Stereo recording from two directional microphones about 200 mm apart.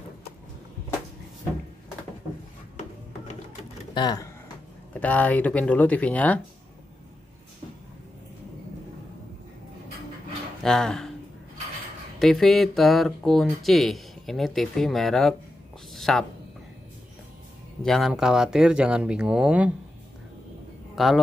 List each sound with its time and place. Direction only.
3.9 s speech: 20° left (ahead or behind)
5.0 s speech: 5° left (ahead or behind)
10.6 s speech: centre (ahead or behind)
12.2 s speech: centre (ahead or behind)
15.9 s a sound: centre (ahead or behind)
17.8 s speech: centre (ahead or behind)
20.9 s speech: centre (ahead or behind)